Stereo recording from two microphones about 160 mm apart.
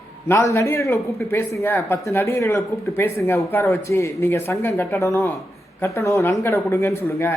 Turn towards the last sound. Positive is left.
turn(degrees=15)  # may be behind; listen again after turning